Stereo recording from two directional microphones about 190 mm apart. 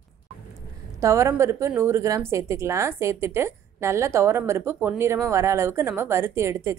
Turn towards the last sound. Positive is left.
turn(degrees=-15)  # may be behind; listen again after turning